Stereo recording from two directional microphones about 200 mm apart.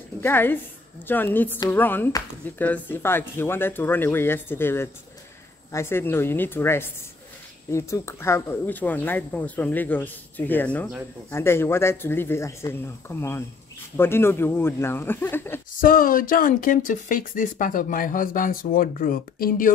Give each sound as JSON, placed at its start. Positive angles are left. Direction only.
{"t": 0.2, "sound": "speech", "side_deg": 10}
{"t": 15.8, "sound": "speech", "side_deg": 45}